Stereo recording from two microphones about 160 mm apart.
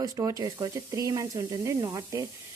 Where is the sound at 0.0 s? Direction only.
20° right (ahead or behind).